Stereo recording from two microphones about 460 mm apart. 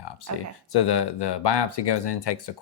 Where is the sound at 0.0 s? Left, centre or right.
Left.